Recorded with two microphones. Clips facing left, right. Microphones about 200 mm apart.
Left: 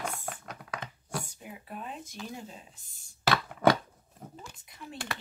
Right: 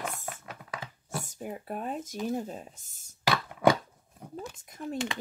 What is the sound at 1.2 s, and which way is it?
Speech, 45° right (ahead or behind).